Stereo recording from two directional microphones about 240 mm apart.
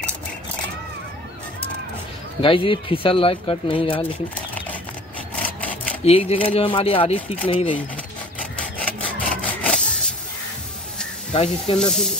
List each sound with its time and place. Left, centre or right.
2.4 s speech: left
6.0 s speech: left
8.5 s wood: centre
11.3 s speech: left
11.8 s speech: centre